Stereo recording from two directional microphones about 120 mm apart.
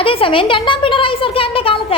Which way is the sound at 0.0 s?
50° left (ahead or behind).